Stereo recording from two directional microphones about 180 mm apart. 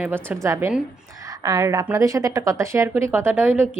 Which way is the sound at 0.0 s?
10° right (ahead or behind).